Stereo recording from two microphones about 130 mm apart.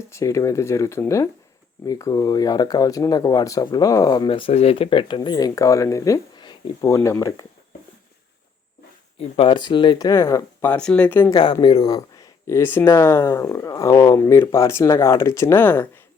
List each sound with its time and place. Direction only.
0.1 s speech: 25° left (ahead or behind)
4.3 s speech: 45° left (ahead or behind)
6.8 s speech: 25° left (ahead or behind)
9.1 s speech: 50° left (ahead or behind)
9.6 s speech: 35° left (ahead or behind)
10.1 s speech: 25° left (ahead or behind)
10.7 s speech: 5° left (ahead or behind)
11.3 s speech: 30° left (ahead or behind)